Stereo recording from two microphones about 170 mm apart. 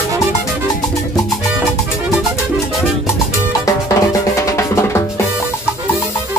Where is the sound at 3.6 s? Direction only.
20° left (ahead or behind).